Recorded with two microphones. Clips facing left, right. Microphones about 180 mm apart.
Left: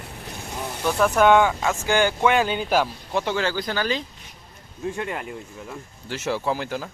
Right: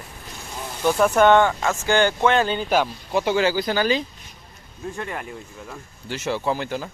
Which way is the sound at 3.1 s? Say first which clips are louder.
Right 4 dB; 10° right (ahead or behind).